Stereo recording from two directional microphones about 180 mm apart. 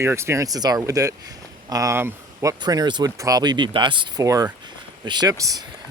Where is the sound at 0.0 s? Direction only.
15° right (ahead or behind).